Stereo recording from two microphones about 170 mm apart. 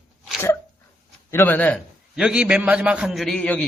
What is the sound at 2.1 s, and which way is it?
A man's voice, 5° right (ahead or behind).